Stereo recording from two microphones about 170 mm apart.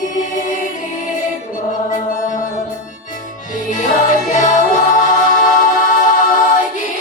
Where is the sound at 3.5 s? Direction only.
50° left (ahead or behind).